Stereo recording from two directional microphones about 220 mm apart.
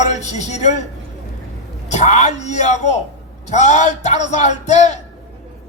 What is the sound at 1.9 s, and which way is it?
A man's voice, 30° left (ahead or behind).